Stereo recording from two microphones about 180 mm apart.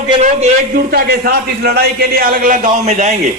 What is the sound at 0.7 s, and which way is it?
A man's voice, 55° right (ahead or behind).